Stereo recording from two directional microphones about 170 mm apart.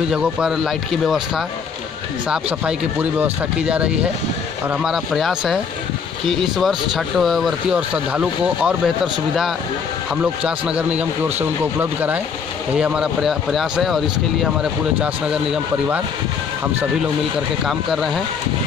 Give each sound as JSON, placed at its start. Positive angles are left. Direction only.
{"t": 0.1, "sound": "speech", "side_deg": -5}
{"t": 17.6, "sound": "speech", "side_deg": 0}